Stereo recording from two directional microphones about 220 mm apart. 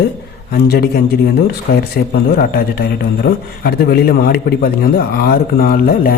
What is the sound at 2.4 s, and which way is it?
A man's voice, 45° left (ahead or behind).